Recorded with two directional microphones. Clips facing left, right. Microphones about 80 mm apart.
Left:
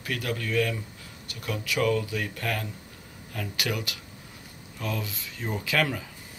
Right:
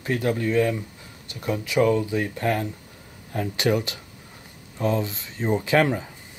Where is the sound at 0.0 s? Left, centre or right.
Right.